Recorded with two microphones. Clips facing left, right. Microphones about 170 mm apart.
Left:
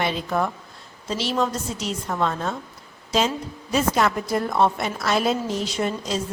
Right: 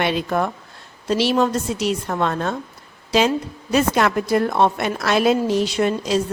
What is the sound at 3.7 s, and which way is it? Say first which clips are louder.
A woman's voice: right 3 dB; 70° right (ahead or behind).